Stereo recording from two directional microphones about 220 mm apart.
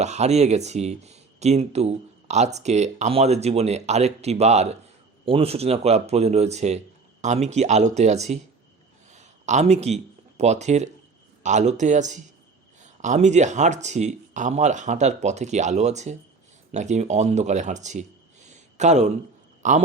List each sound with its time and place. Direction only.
0.0 s speech: 30° right (ahead or behind)